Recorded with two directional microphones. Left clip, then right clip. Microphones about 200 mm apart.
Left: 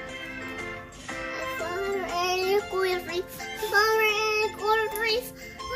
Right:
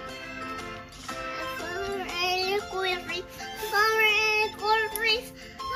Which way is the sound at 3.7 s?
10° left (ahead or behind).